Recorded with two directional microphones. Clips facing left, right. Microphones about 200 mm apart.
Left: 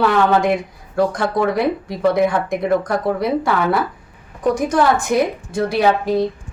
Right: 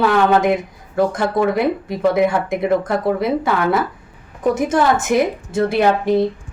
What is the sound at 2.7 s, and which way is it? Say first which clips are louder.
Speech: even; 25° right (ahead or behind).